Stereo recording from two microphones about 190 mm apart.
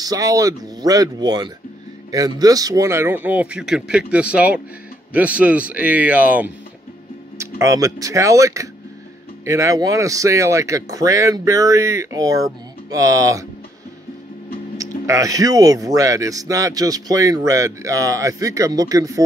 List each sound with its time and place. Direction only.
0.0 s speech: 20° right (ahead or behind)
14.8 s speech: 15° right (ahead or behind)